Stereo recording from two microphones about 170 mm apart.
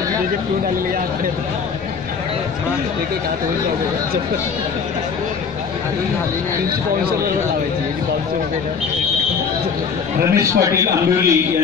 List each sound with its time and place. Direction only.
10.3 s a man's voice: 20° right (ahead or behind)